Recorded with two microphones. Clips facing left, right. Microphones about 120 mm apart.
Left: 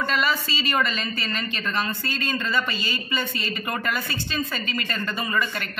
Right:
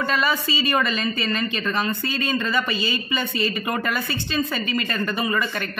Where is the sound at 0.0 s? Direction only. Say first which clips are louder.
Right 2 dB; 20° right (ahead or behind).